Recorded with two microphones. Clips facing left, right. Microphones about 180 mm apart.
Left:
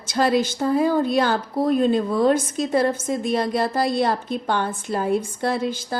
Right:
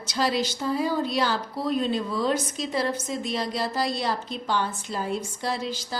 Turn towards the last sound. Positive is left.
turn(degrees=55)  # may be behind; listen again after turning